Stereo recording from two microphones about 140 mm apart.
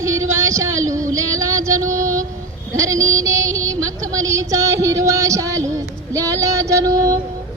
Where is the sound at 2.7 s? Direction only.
20° right (ahead or behind).